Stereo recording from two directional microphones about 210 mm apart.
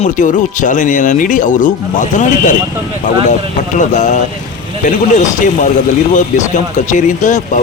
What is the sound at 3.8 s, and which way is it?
A man's voice, 35° left (ahead or behind).